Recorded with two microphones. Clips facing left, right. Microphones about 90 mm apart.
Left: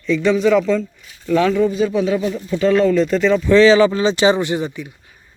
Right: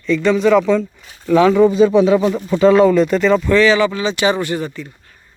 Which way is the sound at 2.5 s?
15° right (ahead or behind).